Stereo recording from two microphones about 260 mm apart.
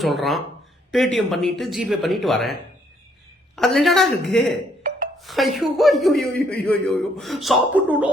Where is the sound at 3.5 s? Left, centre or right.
Centre.